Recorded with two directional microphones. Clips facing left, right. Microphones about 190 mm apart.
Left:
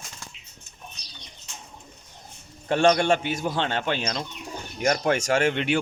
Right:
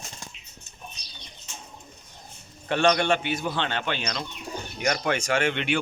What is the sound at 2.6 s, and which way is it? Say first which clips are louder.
Speech: left 2 dB; 40° left (ahead or behind).